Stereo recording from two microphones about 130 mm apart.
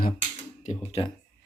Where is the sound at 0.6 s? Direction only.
70° left (ahead or behind).